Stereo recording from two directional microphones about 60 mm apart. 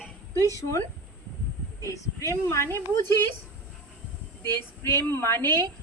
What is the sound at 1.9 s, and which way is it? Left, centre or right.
Speech, left.